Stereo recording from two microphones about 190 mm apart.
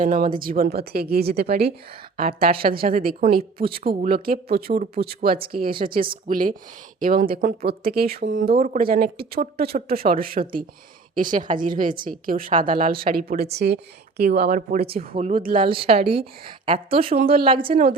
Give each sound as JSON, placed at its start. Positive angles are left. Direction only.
{"t": 0.0, "sound": "speech", "side_deg": -45}
{"t": 3.1, "sound": "a woman's voice", "side_deg": -30}
{"t": 3.6, "sound": "a woman's voice", "side_deg": -50}
{"t": 15.1, "sound": "a woman's voice", "side_deg": -30}
{"t": 17.2, "sound": "speech", "side_deg": -50}
{"t": 17.4, "sound": "a woman's voice", "side_deg": -25}